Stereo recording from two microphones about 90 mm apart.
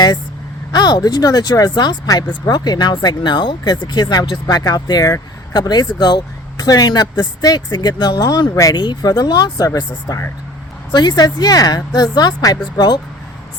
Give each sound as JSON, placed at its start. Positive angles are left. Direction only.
{"t": 0.7, "sound": "speech", "side_deg": 50}